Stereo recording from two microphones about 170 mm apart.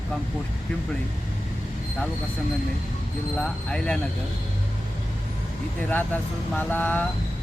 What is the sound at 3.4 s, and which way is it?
Speech, 5° left (ahead or behind).